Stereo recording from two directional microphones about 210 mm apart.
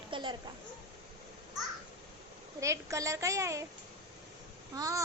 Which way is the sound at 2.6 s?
15° right (ahead or behind).